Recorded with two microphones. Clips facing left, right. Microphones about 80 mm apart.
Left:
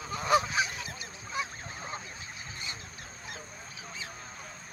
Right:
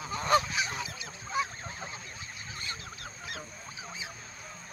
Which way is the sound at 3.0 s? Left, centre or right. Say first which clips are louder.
Right 2 dB; right.